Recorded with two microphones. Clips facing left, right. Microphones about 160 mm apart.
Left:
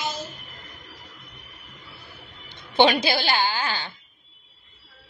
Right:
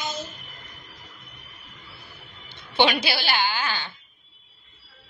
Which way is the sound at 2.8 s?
35° left (ahead or behind).